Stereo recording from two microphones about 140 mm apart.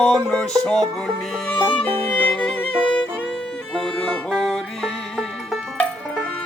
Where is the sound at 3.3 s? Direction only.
5° left (ahead or behind).